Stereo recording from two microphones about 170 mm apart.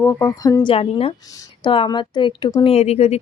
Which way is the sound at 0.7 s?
35° left (ahead or behind).